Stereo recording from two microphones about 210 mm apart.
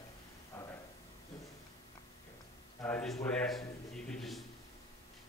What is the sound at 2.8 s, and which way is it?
Speech, 5° left (ahead or behind).